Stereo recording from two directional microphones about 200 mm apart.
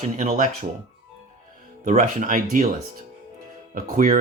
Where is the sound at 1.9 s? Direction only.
40° right (ahead or behind).